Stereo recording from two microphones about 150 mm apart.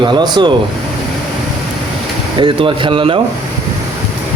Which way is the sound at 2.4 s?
35° right (ahead or behind).